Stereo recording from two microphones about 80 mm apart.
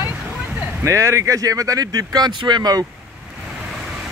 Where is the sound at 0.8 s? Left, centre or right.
Right.